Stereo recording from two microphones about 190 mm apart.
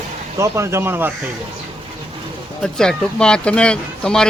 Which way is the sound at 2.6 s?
5° left (ahead or behind).